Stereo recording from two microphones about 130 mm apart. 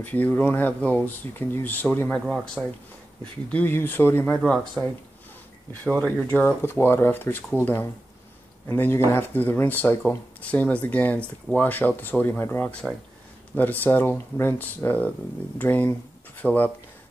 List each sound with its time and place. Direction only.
0.0 s speech: 10° left (ahead or behind)
4.4 s speech: 5° left (ahead or behind)